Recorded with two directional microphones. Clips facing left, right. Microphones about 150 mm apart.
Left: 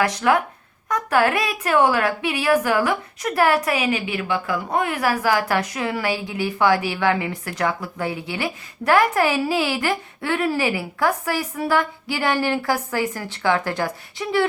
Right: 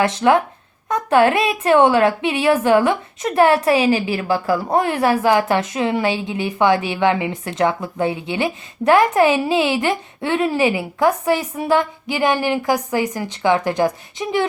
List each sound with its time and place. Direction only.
0.0 s a woman's voice: 25° right (ahead or behind)